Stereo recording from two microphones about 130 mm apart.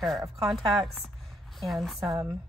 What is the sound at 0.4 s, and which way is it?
A woman's voice, centre (ahead or behind).